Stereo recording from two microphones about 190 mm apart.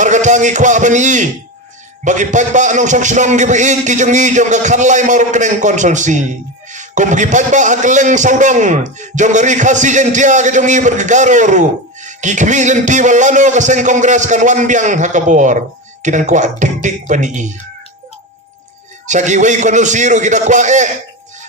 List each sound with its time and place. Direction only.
0.0 s a sound: 40° right (ahead or behind)
2.0 s a man's voice: 40° right (ahead or behind)
19.0 s a man's voice: 40° right (ahead or behind)